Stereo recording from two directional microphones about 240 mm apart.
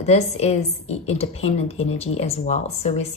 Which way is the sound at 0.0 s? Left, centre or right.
Left.